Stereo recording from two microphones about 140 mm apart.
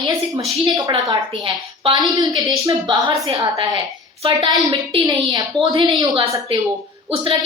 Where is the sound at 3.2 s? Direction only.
25° right (ahead or behind).